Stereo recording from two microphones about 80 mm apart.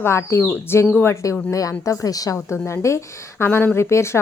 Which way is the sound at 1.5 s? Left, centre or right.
Left.